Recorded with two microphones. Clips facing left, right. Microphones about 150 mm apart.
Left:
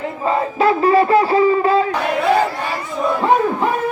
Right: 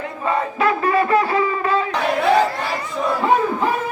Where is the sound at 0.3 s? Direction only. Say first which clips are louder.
Left 3 dB; 30° left (ahead or behind).